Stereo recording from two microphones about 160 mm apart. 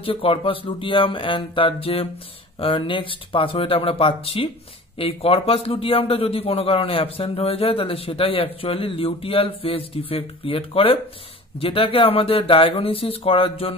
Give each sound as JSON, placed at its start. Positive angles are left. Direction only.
{"t": 0.0, "sound": "a man's voice", "side_deg": 35}